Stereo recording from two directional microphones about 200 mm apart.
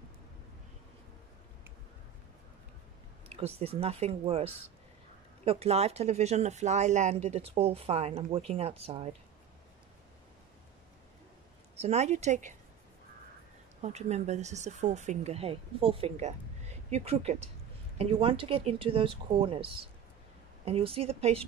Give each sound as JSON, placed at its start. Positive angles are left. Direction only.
{"t": 3.3, "sound": "speech", "side_deg": -30}
{"t": 11.7, "sound": "speech", "side_deg": -35}
{"t": 13.7, "sound": "speech", "side_deg": -35}